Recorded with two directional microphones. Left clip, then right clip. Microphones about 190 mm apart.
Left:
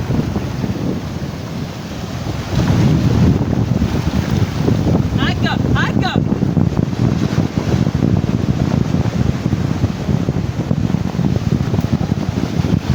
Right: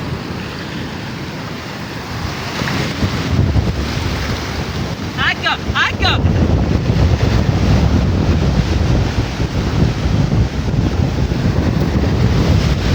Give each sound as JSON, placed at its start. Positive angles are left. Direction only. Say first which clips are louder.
{"t": 5.2, "sound": "vehicle", "louder": "right 7 dB", "side_deg": 25}